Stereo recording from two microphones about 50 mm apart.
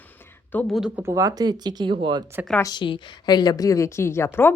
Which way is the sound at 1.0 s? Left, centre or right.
Right.